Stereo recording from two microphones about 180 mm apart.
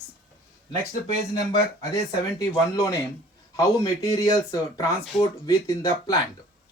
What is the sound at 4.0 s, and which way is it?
Speech, 20° left (ahead or behind).